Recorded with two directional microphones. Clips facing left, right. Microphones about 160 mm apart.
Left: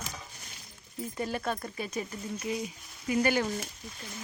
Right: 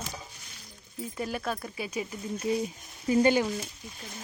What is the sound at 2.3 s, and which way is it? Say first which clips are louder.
Speech: right 6 dB; 30° right (ahead or behind).